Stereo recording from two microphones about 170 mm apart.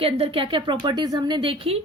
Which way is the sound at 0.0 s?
30° right (ahead or behind).